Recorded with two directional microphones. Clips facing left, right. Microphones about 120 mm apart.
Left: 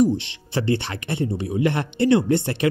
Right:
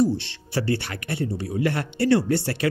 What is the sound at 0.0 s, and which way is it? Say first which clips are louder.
Speech: left 3 dB; 15° left (ahead or behind).